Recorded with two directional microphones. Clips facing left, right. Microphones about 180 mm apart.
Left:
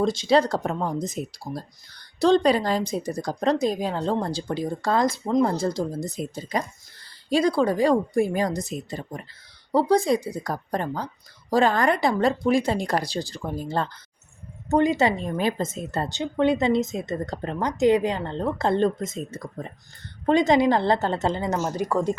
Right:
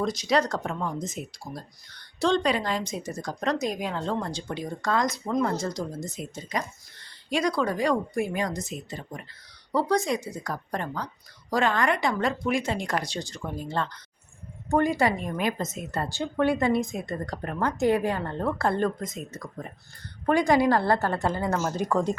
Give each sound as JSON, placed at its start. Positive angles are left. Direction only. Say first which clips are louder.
{"t": 0.0, "sound": "speech", "louder": "left 5 dB", "side_deg": 25}
{"t": 14.7, "sound": "speech", "louder": "left 3 dB", "side_deg": 20}